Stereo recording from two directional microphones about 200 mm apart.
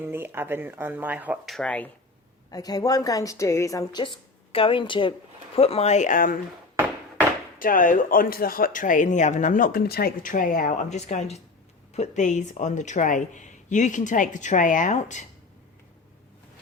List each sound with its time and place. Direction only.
0.0 s speech: 10° right (ahead or behind); by 1.9 s 5° left (ahead or behind)
2.5 s a woman's voice: 20° left (ahead or behind); by 6.4 s 45° left (ahead or behind)
7.6 s speech: 45° left (ahead or behind)